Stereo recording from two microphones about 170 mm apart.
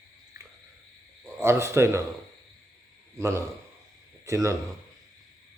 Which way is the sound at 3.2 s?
15° right (ahead or behind).